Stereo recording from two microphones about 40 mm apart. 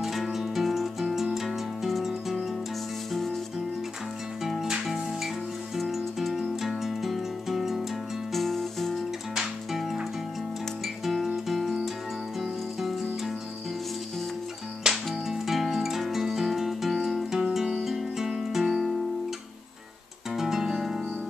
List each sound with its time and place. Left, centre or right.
0.0 s music: centre
3.1 s music: centre
4.8 s music: centre
8.3 s music: centre
9.3 s music: centre
11.1 s music: centre
14.8 s music: centre
18.6 s music: centre
20.3 s music: centre